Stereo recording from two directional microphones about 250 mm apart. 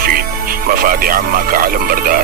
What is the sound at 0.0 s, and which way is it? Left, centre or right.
Speech, right.